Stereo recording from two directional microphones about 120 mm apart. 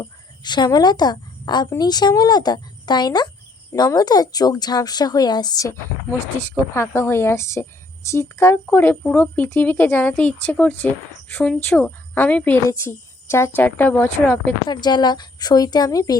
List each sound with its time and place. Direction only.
0.0 s a woman's voice: 35° left (ahead or behind)
6.1 s speech: 25° left (ahead or behind)
14.7 s a woman's voice: 35° left (ahead or behind)